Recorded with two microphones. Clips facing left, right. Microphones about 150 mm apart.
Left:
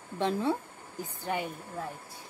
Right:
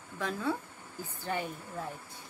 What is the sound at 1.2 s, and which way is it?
Speech, 15° left (ahead or behind).